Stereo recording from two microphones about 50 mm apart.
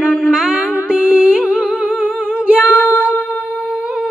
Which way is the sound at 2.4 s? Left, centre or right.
Centre.